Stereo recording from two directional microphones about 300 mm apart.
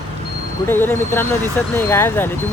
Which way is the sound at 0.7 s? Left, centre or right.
Centre.